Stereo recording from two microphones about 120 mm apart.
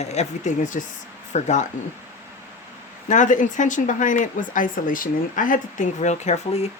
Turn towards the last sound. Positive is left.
turn(degrees=65)  # may be behind; listen again after turning